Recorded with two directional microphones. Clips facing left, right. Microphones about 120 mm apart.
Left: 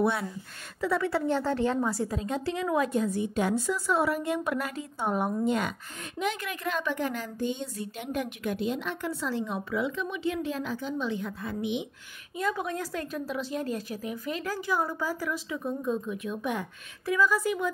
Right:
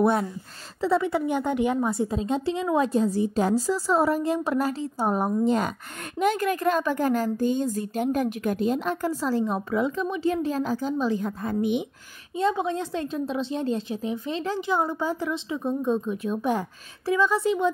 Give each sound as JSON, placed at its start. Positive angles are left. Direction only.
{"t": 0.0, "sound": "speech", "side_deg": -45}
{"t": 0.7, "sound": "a woman's voice", "side_deg": -25}
{"t": 12.4, "sound": "a woman's voice", "side_deg": -25}